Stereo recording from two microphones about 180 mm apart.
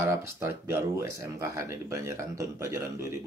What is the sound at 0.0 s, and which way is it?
Speech, 15° right (ahead or behind).